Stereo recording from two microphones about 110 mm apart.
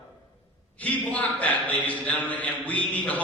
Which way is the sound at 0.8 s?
15° left (ahead or behind).